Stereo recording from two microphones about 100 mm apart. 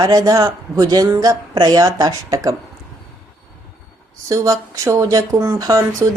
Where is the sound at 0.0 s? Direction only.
35° right (ahead or behind).